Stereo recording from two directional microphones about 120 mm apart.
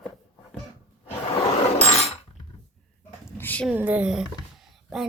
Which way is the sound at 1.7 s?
60° left (ahead or behind).